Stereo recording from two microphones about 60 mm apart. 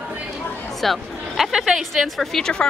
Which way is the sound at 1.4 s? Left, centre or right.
Centre.